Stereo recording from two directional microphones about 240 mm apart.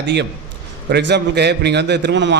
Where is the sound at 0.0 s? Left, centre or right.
Right.